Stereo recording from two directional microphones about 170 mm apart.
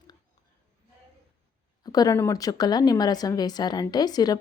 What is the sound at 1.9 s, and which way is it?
Speech, 20° left (ahead or behind).